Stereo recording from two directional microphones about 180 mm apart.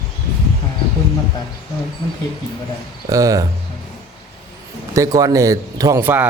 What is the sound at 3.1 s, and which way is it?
Speech, 20° right (ahead or behind).